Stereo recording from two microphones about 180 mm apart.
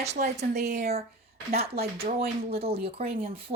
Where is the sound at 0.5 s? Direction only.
65° right (ahead or behind).